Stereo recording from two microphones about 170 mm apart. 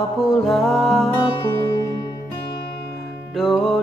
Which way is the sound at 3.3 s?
Centre (ahead or behind).